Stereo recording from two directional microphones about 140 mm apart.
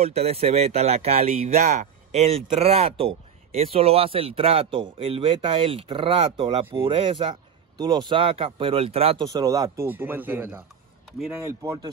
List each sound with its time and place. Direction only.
0.0 s speech: 45° right (ahead or behind)
9.2 s speech: 30° right (ahead or behind)
9.8 s speech: 15° right (ahead or behind)